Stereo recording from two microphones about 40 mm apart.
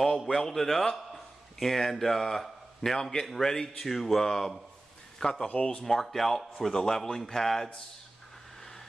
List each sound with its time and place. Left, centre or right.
0.0 s a man's voice: centre
5.5 s speech: left
5.9 s a man's voice: centre